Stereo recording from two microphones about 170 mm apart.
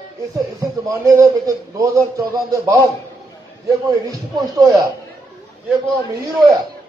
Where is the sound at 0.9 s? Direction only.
20° right (ahead or behind).